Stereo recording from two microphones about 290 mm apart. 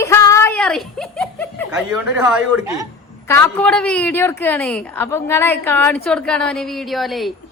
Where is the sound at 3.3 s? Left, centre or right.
Centre.